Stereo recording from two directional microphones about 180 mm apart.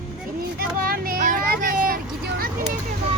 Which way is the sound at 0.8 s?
55° right (ahead or behind).